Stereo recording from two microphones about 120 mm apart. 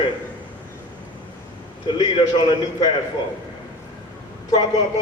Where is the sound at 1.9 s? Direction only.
40° left (ahead or behind).